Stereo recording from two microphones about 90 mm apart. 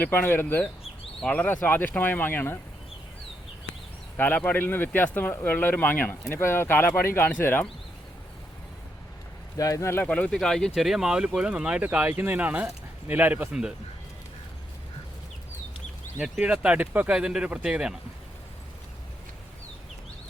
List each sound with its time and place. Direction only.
0.0 s speech: 25° left (ahead or behind)
4.2 s speech: 20° left (ahead or behind)
9.6 s speech: 40° left (ahead or behind)
10.1 s speech: 15° left (ahead or behind); by 13.7 s 10° right (ahead or behind)
16.4 s speech: 15° right (ahead or behind)